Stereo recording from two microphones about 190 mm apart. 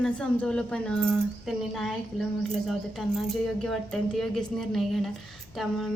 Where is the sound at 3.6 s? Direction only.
5° left (ahead or behind).